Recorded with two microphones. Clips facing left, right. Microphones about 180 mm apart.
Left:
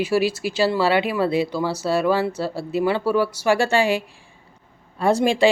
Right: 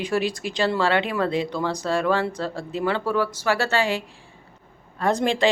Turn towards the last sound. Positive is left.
turn(degrees=10)  # may be behind; listen again after turning